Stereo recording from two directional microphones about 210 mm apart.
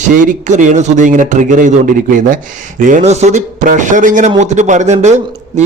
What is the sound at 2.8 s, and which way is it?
A man's voice, 35° right (ahead or behind).